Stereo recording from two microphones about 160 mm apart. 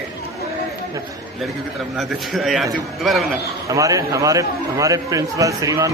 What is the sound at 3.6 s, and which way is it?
A man's voice, 20° right (ahead or behind).